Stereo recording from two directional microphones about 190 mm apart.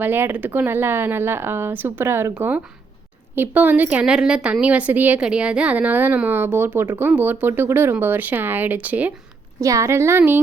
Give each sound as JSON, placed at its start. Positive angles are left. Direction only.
{"t": 0.0, "sound": "a woman's voice", "side_deg": -10}